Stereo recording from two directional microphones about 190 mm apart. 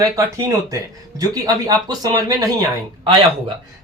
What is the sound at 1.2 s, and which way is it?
Speech, 20° right (ahead or behind).